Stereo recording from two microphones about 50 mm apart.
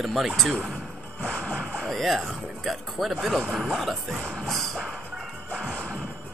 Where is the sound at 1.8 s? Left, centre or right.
Centre.